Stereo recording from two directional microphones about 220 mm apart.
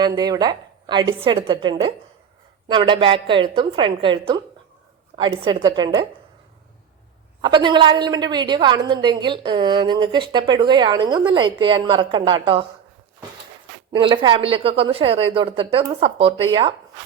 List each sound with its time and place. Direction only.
0.2 s speech: 20° right (ahead or behind)
7.4 s speech: 20° right (ahead or behind)
13.9 s speech: 20° right (ahead or behind)